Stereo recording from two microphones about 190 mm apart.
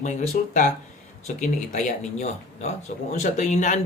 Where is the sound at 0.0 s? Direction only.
40° left (ahead or behind).